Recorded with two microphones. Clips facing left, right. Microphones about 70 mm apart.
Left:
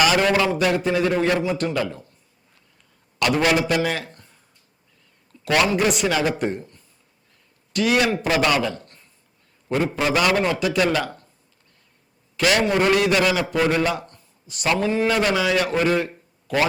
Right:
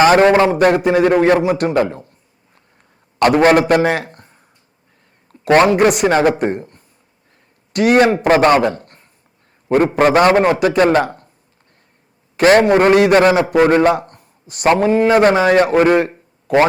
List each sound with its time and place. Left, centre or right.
0.0 s a man's voice: right
1.7 s a man's voice: right
3.2 s a man's voice: right
5.3 s a sound: right
5.6 s a man's voice: right
8.0 s a man's voice: right
12.4 s a man's voice: right